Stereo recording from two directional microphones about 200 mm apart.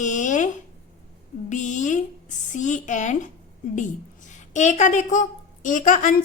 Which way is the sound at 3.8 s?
40° left (ahead or behind).